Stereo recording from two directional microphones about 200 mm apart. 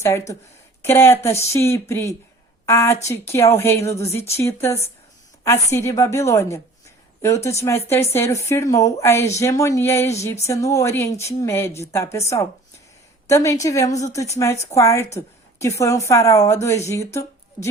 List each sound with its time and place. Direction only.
0.0 s a woman's voice: 15° left (ahead or behind)